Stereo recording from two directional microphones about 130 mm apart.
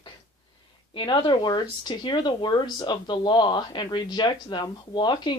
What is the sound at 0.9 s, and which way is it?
Speech, 35° left (ahead or behind).